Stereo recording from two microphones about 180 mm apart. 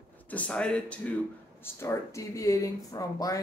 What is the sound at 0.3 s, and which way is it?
Speech, 5° left (ahead or behind).